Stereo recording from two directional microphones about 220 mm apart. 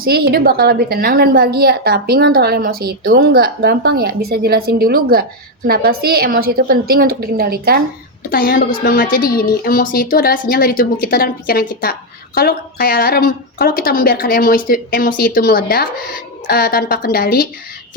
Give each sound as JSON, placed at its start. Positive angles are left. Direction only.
{"t": 0.0, "sound": "a woman's voice", "side_deg": -45}
{"t": 8.3, "sound": "speech", "side_deg": 40}